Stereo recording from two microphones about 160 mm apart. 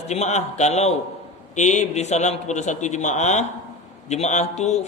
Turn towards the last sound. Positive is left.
turn(degrees=45)  # may be behind; listen again after turning